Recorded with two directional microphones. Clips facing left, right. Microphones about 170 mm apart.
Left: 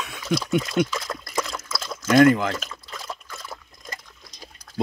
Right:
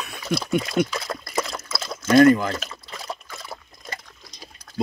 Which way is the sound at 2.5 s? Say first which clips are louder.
Right 1 dB; 10° right (ahead or behind).